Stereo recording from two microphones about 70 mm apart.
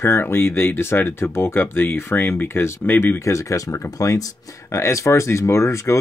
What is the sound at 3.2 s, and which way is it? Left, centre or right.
Speech, left.